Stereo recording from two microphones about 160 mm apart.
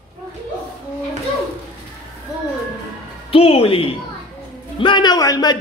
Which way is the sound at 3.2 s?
35° left (ahead or behind).